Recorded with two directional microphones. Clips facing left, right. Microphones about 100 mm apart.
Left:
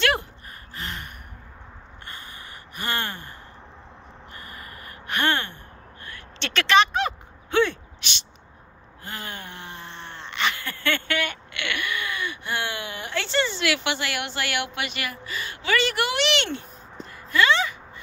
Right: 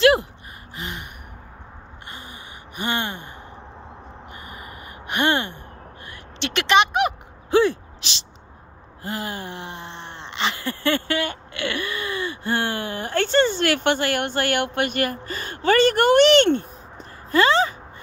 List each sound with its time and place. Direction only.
0.7 s gasp: 15° right (ahead or behind)
2.0 s gasp: 20° right (ahead or behind)
4.3 s gasp: 20° right (ahead or behind)
6.4 s a sound: 25° right (ahead or behind)
9.0 s speech: 30° right (ahead or behind); by 16.6 s 45° right (ahead or behind)
17.3 s a sound: 35° right (ahead or behind)